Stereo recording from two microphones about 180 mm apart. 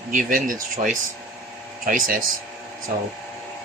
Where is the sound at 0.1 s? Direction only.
50° right (ahead or behind).